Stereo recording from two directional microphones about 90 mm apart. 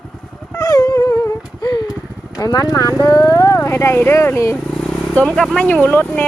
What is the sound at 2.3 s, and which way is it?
Speech, 40° left (ahead or behind).